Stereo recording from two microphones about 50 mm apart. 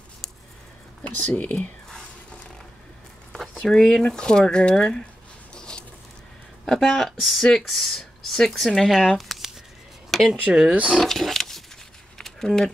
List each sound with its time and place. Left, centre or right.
1.0 s speech: left
3.3 s speech: centre
5.5 s a sound: centre
6.6 s speech: centre
9.2 s a sound: centre
10.1 s speech: centre
10.7 s speech: right
11.0 s vehicle: centre
12.2 s a sound: centre